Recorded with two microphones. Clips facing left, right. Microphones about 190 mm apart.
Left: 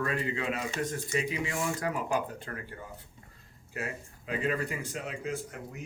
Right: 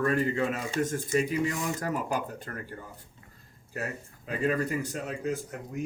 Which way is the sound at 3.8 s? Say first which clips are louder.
Right 2 dB; 40° right (ahead or behind).